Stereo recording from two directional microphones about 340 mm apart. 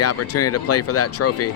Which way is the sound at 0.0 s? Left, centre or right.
Left.